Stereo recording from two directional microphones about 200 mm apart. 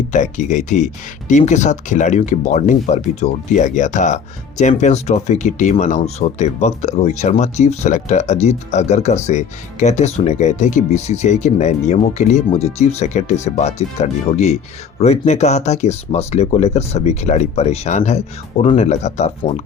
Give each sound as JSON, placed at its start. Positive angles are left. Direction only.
{"t": 0.1, "sound": "speech", "side_deg": 40}